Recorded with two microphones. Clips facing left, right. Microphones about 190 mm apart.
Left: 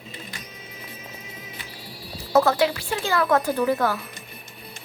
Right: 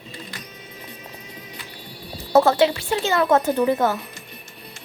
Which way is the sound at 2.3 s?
25° right (ahead or behind).